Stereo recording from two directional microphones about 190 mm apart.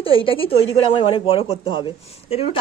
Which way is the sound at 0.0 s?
30° left (ahead or behind).